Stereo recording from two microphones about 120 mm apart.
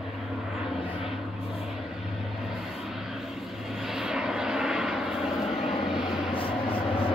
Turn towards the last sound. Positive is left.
turn(degrees=50)  # may be behind; listen again after turning